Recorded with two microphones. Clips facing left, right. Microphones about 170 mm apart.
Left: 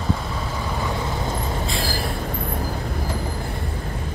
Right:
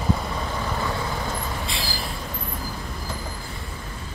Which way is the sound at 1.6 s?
50° left (ahead or behind).